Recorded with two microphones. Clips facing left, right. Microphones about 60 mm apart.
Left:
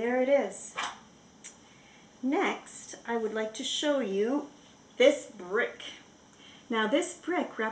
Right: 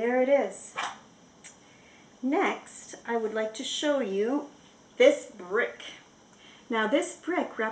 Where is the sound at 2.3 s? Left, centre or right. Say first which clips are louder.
Right 2 dB; centre.